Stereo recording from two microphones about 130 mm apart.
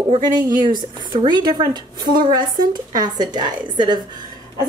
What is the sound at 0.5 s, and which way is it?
A woman's voice, 35° right (ahead or behind).